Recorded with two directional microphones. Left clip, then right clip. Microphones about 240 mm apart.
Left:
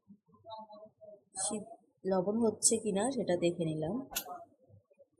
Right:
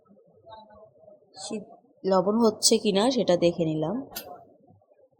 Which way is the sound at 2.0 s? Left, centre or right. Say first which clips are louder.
Right 9 dB; right.